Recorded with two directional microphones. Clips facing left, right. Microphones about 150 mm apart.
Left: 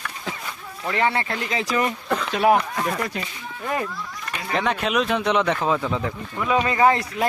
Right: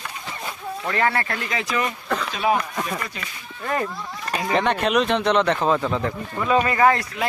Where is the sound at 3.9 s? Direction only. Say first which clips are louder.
Right 3 dB; 35° right (ahead or behind).